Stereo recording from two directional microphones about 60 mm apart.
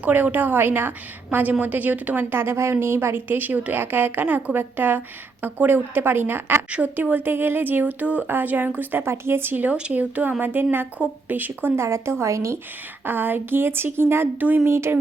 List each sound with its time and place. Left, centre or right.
0.0 s a woman's voice: right
6.7 s a woman's voice: right
11.8 s a woman's voice: right
13.1 s a woman's voice: right
14.7 s a woman's voice: right